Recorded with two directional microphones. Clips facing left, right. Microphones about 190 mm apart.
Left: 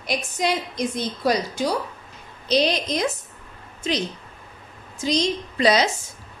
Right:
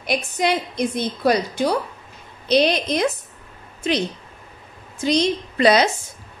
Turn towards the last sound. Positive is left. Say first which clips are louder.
# right 3 dB
turn(degrees=-60)  # may be behind; listen again after turning